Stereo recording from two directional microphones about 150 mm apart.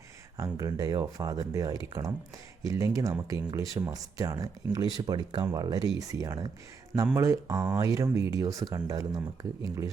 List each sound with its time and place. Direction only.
0.3 s speech: 20° right (ahead or behind)